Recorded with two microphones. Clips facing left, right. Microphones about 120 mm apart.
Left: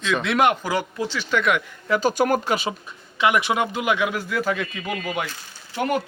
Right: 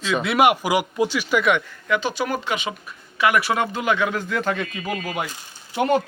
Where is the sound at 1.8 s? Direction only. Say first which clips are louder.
Left 5 dB; 40° left (ahead or behind).